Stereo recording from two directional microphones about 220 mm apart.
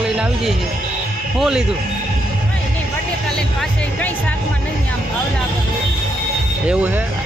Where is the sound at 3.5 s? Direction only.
5° left (ahead or behind).